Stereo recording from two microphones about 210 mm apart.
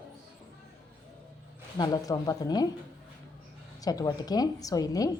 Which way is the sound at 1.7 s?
20° left (ahead or behind).